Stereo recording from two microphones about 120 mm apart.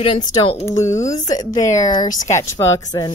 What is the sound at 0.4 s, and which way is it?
Speech, 50° left (ahead or behind).